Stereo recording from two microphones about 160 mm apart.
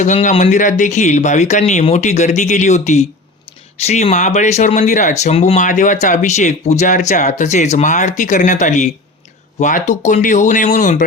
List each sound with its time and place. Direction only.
0.0 s speech: 50° left (ahead or behind)